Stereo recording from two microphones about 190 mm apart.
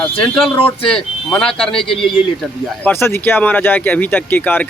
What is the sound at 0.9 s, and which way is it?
A man's voice, 5° left (ahead or behind).